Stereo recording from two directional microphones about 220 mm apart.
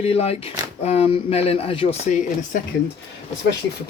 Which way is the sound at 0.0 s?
25° left (ahead or behind).